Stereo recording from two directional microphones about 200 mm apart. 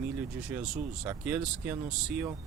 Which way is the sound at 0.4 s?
5° right (ahead or behind).